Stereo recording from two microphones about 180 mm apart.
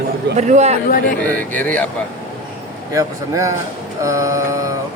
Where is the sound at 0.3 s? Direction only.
40° right (ahead or behind).